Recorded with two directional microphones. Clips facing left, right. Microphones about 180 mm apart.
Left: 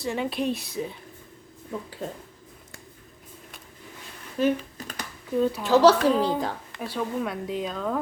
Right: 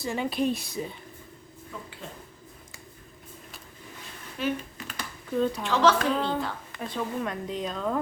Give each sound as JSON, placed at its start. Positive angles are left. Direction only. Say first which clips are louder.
{"t": 0.0, "sound": "speech", "louder": "even", "side_deg": 0}
{"t": 4.4, "sound": "computer keyboard", "louder": "left 6 dB", "side_deg": 40}
{"t": 5.4, "sound": "a woman's voice", "louder": "left 2 dB", "side_deg": 5}
{"t": 5.6, "sound": "speech", "louder": "left 7 dB", "side_deg": 40}
{"t": 6.1, "sound": "a woman's voice", "louder": "left 4 dB", "side_deg": 10}